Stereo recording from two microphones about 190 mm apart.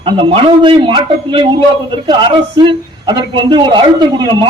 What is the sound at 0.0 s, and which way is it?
A man's voice, 25° right (ahead or behind).